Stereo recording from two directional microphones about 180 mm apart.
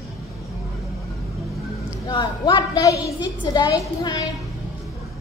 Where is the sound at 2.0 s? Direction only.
20° left (ahead or behind).